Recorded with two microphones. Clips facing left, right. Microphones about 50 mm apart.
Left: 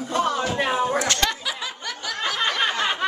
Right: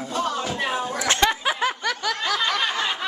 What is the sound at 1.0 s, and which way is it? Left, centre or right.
Speech, centre.